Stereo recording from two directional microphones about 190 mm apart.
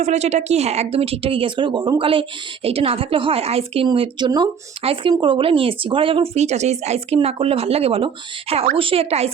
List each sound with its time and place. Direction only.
0.0 s speech: 35° right (ahead or behind)